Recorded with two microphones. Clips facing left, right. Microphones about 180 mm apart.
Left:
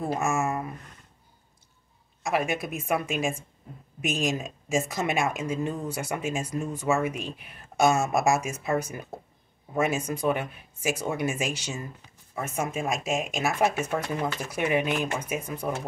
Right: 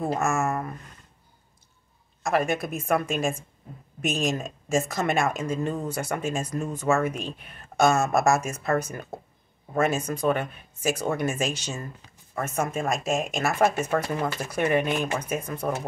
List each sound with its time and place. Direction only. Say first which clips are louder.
0.1 s speech: left 1 dB; 15° left (ahead or behind)
2.2 s speech: right 3 dB; 5° left (ahead or behind)